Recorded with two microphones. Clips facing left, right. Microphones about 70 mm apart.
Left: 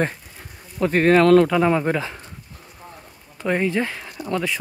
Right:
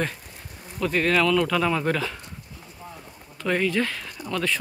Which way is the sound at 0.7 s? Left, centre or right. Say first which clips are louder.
Left 6 dB; left.